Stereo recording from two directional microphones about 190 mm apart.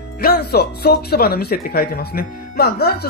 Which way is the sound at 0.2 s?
55° left (ahead or behind).